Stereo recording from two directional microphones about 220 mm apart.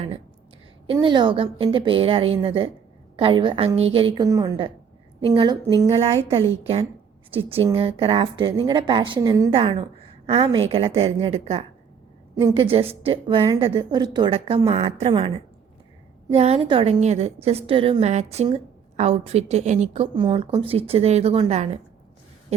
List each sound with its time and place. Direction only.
0.9 s a woman's voice: 20° right (ahead or behind)
7.3 s a woman's voice: 25° right (ahead or behind)
12.4 s a woman's voice: 15° right (ahead or behind)
16.3 s a woman's voice: 30° right (ahead or behind)